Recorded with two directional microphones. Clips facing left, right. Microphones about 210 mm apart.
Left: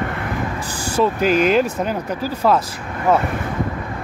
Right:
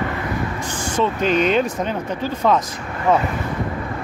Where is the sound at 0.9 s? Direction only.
10° left (ahead or behind).